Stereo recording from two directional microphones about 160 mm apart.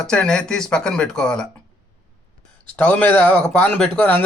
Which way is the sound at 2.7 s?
10° left (ahead or behind).